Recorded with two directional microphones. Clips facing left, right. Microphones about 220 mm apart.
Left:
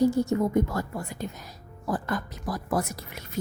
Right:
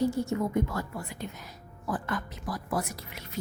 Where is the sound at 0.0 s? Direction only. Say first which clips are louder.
Left 5 dB; 40° left (ahead or behind).